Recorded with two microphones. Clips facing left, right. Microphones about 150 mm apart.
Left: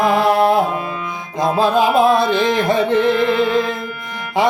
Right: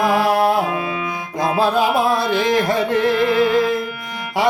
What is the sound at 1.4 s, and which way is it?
Speech, 20° left (ahead or behind).